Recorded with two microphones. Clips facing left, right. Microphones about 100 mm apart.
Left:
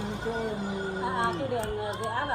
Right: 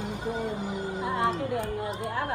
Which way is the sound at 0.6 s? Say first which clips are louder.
Even; 20° right (ahead or behind).